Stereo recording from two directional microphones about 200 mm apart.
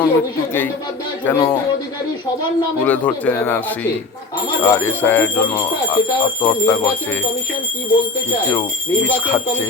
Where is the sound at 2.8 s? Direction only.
10° left (ahead or behind).